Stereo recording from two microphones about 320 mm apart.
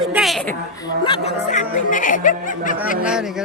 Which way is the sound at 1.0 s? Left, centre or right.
Centre.